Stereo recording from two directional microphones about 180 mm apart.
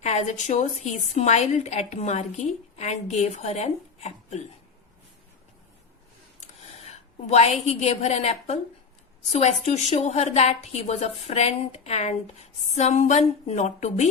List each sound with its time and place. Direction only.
0.0 s a woman's voice: 40° left (ahead or behind)
6.4 s a sound: 40° left (ahead or behind)
7.7 s a woman's voice: 35° left (ahead or behind)